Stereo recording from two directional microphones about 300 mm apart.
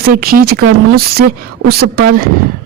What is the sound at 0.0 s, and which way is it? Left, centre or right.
Speech, right.